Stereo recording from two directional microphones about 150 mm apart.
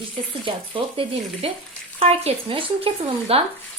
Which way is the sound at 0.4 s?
35° right (ahead or behind).